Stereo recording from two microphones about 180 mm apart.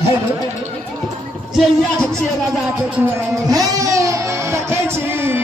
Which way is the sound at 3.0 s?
15° right (ahead or behind).